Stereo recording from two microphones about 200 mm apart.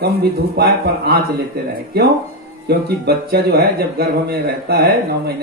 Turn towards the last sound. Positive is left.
turn(degrees=-50)  # may be behind; listen again after turning